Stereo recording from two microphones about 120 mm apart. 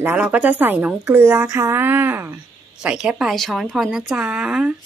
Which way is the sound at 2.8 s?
5° right (ahead or behind).